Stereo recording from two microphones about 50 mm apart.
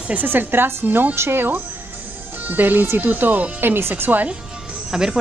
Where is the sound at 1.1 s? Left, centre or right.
Right.